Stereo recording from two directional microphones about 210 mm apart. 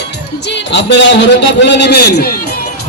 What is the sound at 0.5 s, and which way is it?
A man's voice, 55° left (ahead or behind).